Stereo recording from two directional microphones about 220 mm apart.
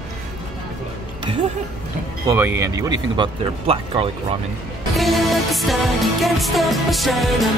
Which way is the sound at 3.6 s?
25° right (ahead or behind).